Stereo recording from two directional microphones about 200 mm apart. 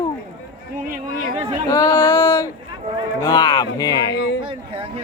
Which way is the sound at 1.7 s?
15° left (ahead or behind).